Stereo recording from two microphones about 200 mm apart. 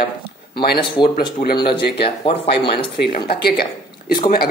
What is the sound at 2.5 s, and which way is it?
Speech, 55° left (ahead or behind).